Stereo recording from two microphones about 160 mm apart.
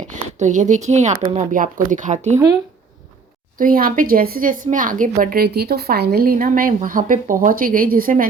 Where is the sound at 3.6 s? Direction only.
65° right (ahead or behind).